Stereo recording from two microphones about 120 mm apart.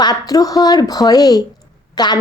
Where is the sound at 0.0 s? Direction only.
30° left (ahead or behind).